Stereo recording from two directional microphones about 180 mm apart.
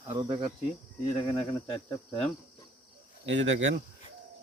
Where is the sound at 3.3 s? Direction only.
85° right.